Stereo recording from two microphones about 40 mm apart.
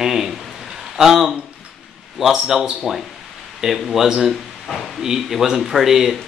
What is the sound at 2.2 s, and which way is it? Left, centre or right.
A woman's voice, centre.